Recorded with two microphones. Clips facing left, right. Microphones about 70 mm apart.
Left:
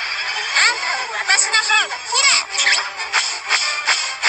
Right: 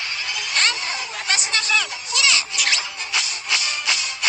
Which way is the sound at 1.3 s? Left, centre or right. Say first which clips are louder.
Left 5 dB; left.